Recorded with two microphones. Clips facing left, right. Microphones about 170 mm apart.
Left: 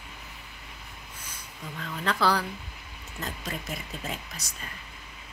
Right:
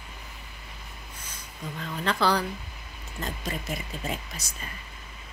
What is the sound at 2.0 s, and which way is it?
A woman's voice, centre (ahead or behind).